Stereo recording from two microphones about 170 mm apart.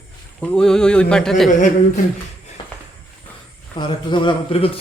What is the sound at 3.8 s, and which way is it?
Speech, 25° left (ahead or behind).